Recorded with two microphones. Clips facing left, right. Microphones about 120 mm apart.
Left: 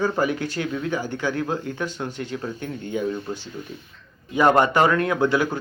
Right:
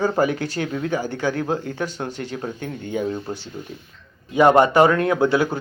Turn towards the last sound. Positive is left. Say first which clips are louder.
# right 2 dB
turn(degrees=-25)  # may be behind; listen again after turning